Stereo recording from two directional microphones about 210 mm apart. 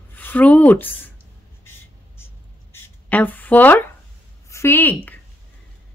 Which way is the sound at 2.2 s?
10° left (ahead or behind).